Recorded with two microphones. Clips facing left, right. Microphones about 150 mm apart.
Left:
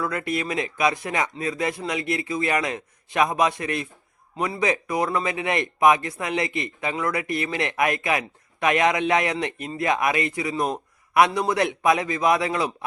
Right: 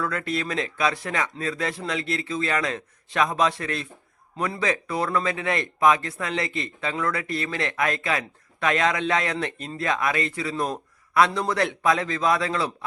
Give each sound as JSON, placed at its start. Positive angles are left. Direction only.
{"t": 0.0, "sound": "a man's voice", "side_deg": 10}